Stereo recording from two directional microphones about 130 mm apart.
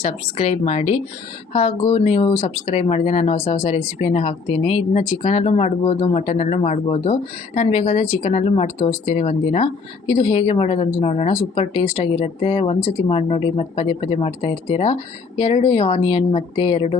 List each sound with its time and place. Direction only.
0.0 s a woman's voice: 55° left (ahead or behind)